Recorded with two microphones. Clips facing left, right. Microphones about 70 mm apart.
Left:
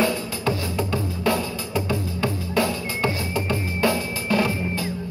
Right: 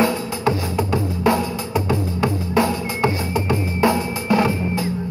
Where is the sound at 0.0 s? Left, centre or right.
Centre.